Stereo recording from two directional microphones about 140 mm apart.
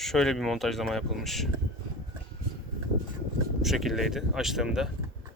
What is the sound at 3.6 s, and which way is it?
Speech, centre (ahead or behind).